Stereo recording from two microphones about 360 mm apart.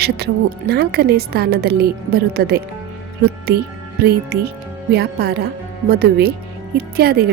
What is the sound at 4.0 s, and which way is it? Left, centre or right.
Speech, right.